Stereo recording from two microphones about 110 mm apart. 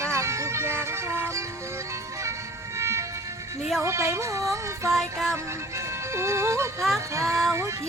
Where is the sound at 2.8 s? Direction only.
25° right (ahead or behind).